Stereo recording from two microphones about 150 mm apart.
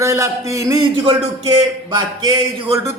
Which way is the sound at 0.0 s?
20° right (ahead or behind).